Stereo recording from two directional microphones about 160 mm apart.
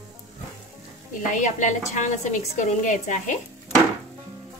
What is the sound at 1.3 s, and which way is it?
A woman's voice, 50° left (ahead or behind).